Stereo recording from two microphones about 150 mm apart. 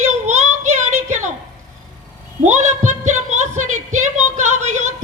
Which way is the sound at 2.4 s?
55° right (ahead or behind).